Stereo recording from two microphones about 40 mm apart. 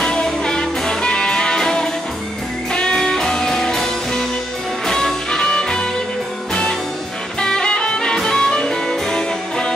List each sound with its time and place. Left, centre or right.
0.0 s music: centre
7.3 s music: left